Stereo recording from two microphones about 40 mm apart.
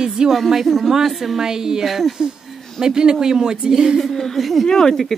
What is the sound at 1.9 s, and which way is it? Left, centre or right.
Speech, centre.